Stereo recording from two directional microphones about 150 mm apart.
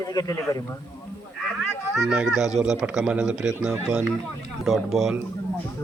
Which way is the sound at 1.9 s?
5° right (ahead or behind).